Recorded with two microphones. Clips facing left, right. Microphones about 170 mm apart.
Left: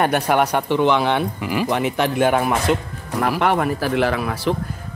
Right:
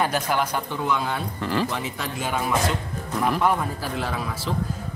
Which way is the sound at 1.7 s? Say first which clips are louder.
Left 10 dB; 65° left (ahead or behind).